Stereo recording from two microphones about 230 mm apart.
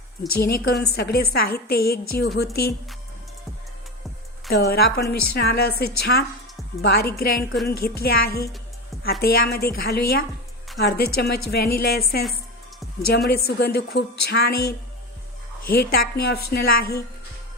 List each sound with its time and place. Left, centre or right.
0.3 s a woman's voice: left
4.4 s a woman's voice: left